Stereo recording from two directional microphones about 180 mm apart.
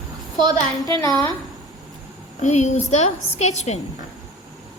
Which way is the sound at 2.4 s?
40° left (ahead or behind).